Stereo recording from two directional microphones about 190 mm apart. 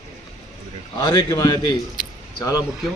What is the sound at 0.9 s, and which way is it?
A man's voice, 20° left (ahead or behind).